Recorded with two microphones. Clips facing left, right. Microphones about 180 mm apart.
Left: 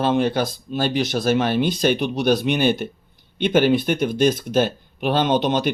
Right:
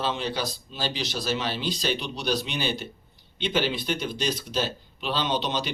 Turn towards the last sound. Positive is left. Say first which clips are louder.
# left 8 dB
turn(degrees=50)  # may be behind; listen again after turning